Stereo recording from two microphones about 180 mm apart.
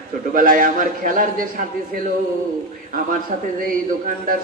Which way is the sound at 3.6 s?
50° right (ahead or behind).